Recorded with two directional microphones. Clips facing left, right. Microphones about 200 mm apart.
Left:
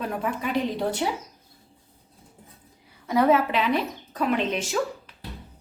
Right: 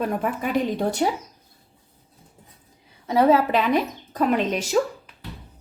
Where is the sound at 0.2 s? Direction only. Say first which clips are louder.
Right 2 dB; 50° right (ahead or behind).